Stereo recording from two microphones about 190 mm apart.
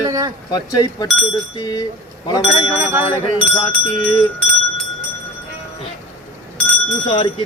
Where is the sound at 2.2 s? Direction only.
20° left (ahead or behind).